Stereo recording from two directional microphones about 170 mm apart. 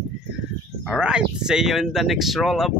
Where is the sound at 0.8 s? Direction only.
5° right (ahead or behind).